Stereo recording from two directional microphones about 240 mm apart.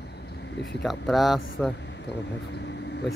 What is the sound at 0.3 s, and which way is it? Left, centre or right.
Vehicle, left.